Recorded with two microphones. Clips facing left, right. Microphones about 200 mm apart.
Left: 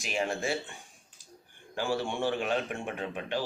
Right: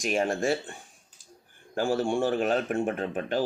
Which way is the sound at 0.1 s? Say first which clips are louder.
Right 4 dB; 45° right (ahead or behind).